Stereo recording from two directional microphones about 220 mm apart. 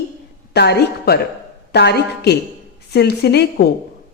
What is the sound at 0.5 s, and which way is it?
A woman's voice, 50° left (ahead or behind).